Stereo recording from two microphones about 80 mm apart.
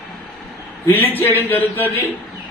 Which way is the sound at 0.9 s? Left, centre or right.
Left.